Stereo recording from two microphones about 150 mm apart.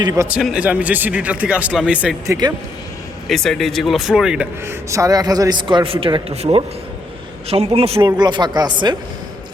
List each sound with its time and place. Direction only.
0.0 s a man's voice: 25° right (ahead or behind)
0.3 s speech: 5° right (ahead or behind)
2.2 s a man's voice: 20° right (ahead or behind)
3.2 s speech: centre (ahead or behind)
4.6 s a man's voice: 20° right (ahead or behind); by 8.1 s 40° right (ahead or behind)
8.2 s a man's voice: 30° right (ahead or behind)